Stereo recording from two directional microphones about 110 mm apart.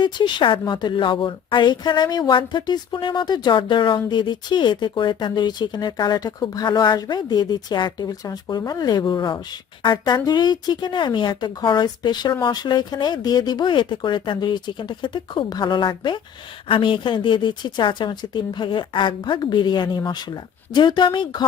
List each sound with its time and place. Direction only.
0.0 s a woman's voice: 45° left (ahead or behind)